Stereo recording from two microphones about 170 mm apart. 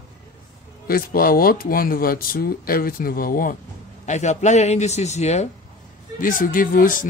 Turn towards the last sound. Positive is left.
turn(degrees=55)  # may be behind; listen again after turning